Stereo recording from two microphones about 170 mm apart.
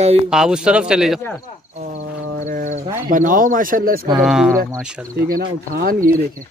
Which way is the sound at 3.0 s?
55° right (ahead or behind).